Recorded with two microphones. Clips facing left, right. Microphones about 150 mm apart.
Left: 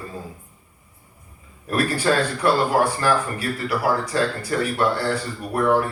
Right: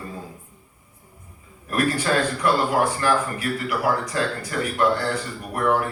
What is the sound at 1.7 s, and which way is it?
A man's voice, 30° left (ahead or behind).